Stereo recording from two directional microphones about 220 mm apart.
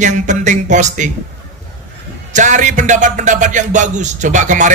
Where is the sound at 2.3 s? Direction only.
35° right (ahead or behind).